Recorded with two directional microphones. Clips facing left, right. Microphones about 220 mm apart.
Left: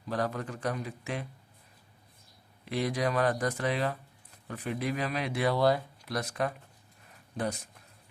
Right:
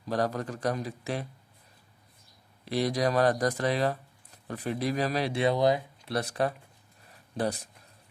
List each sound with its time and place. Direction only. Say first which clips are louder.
0.1 s speech: right 3 dB; 35° right (ahead or behind)
2.6 s speech: right 3 dB; 35° right (ahead or behind); by 5.8 s 20° right (ahead or behind)
6.1 s speech: right 3 dB; 30° right (ahead or behind)